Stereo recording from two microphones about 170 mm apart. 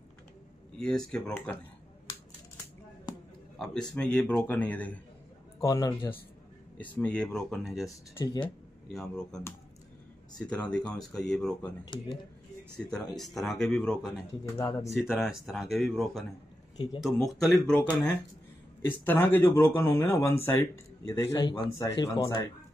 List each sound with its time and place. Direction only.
0.7 s speech: 5° left (ahead or behind)
3.5 s a man's voice: 5° left (ahead or behind)
5.6 s speech: 20° left (ahead or behind)
7.0 s speech: 5° left (ahead or behind)
7.8 s speech: 20° left (ahead or behind)
9.0 s speech: 5° left (ahead or behind)
12.7 s speech: 5° left (ahead or behind)
14.6 s speech: 20° left (ahead or behind)
14.9 s speech: centre (ahead or behind)
16.7 s speech: 25° left (ahead or behind)
17.0 s speech: centre (ahead or behind); by 22.5 s 20° left (ahead or behind)